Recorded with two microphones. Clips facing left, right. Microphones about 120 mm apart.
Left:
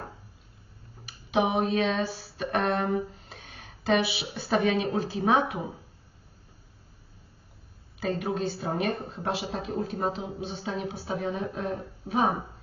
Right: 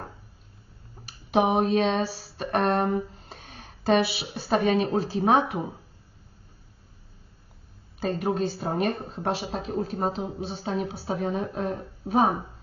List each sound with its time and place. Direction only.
1.0 s speech: 35° right (ahead or behind)
3.2 s a sound: 40° right (ahead or behind)
4.4 s speech: 40° right (ahead or behind)
7.9 s speech: 40° right (ahead or behind)